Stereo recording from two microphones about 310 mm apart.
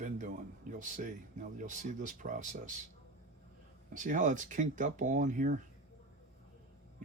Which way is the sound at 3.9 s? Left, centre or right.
Right.